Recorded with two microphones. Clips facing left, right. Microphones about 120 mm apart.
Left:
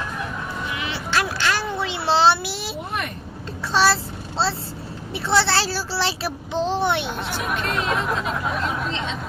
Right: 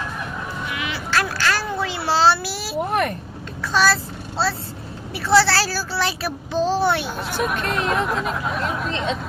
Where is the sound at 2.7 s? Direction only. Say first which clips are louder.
Right 11 dB; 50° right (ahead or behind).